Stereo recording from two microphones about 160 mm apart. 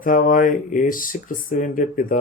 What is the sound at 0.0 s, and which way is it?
Speech, 60° left (ahead or behind).